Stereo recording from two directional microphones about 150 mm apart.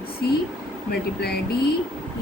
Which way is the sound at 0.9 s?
90° left.